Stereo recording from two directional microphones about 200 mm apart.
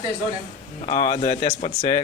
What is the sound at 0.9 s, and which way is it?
Speech, 40° left (ahead or behind).